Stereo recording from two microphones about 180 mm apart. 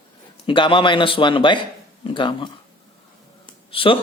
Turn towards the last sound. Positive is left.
turn(degrees=30)  # may be behind; listen again after turning